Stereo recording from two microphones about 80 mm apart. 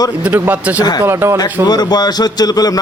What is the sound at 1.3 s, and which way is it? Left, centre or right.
A man's voice, left.